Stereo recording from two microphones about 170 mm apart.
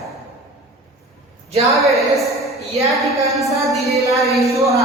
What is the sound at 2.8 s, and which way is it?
Music, centre (ahead or behind).